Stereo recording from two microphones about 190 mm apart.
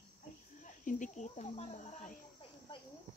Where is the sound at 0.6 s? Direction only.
40° left (ahead or behind).